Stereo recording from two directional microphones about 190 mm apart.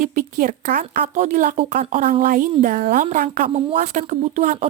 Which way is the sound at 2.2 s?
45° right (ahead or behind).